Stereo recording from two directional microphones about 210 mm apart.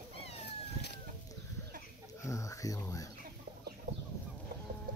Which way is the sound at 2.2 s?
15° left (ahead or behind).